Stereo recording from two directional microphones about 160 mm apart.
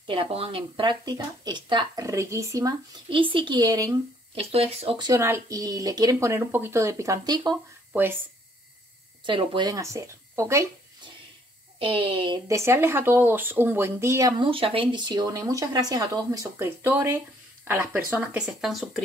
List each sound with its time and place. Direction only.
0.0 s speech: 35° right (ahead or behind)
3.1 s speech: 30° right (ahead or behind)
4.4 s speech: 40° right (ahead or behind)
9.2 s speech: 30° right (ahead or behind)
11.8 s speech: 35° right (ahead or behind)
12.4 s speech: 15° right (ahead or behind)
14.4 s speech: 35° right (ahead or behind); by 19.0 s centre (ahead or behind)